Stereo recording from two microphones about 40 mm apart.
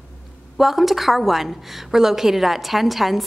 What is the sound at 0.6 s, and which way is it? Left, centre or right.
A woman's voice, centre.